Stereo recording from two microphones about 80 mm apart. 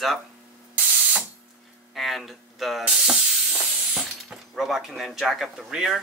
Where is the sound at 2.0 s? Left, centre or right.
Centre.